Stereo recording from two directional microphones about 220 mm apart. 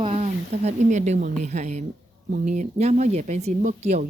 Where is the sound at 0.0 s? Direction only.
30° right (ahead or behind).